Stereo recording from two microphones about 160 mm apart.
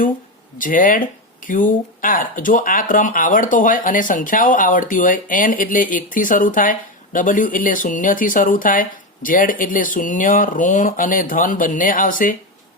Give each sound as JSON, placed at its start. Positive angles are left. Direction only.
{"t": 0.6, "sound": "speech", "side_deg": 55}